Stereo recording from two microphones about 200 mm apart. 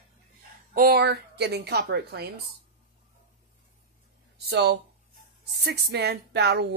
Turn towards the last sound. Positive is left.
turn(degrees=-55)  # may be behind; listen again after turning